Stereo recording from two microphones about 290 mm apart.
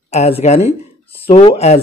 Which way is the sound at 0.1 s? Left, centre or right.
Left.